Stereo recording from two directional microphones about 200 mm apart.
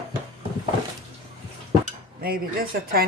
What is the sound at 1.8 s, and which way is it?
Speech, 45° right (ahead or behind).